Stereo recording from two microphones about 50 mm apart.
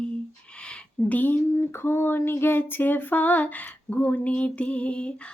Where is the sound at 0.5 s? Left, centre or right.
Centre.